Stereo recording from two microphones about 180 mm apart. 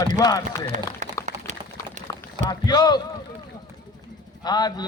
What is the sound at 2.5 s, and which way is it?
Speech, 25° left (ahead or behind).